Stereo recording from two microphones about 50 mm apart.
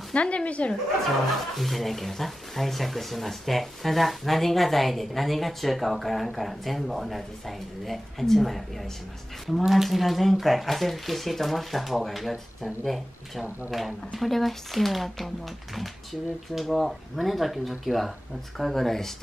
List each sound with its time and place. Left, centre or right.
0.1 s speech: left
1.6 s speech: centre